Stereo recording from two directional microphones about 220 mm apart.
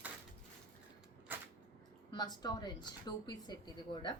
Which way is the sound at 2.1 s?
20° left (ahead or behind).